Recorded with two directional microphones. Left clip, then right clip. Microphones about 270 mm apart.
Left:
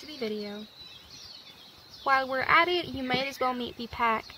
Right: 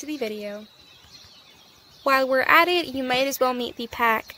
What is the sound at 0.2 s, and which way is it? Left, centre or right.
Speech, right.